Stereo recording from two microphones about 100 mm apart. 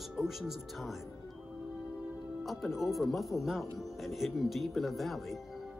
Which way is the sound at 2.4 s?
Centre (ahead or behind).